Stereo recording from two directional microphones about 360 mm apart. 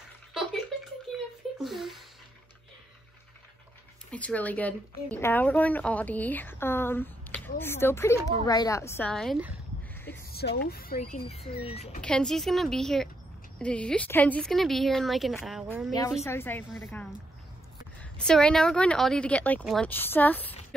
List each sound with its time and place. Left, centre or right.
1.1 s a sound: centre
1.6 s speech: centre
4.1 s a woman's voice: centre
10.3 s speech: left
12.0 s a woman's voice: centre
15.9 s a woman's voice: centre
18.1 s a woman's voice: centre